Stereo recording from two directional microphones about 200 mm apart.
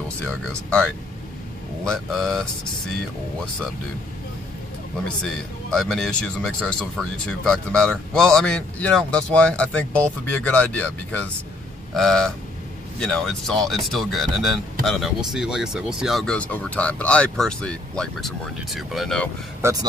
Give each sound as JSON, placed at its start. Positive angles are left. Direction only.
{"t": 0.2, "sound": "speech", "side_deg": 5}
{"t": 1.9, "sound": "speech", "side_deg": 0}
{"t": 5.0, "sound": "speech", "side_deg": 5}
{"t": 19.6, "sound": "a man's voice", "side_deg": -15}